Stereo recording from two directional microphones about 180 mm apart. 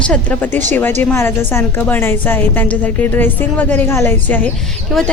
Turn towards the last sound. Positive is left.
turn(degrees=10)  # may be behind; listen again after turning